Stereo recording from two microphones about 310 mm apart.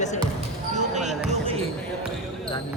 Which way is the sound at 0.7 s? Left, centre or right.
Right.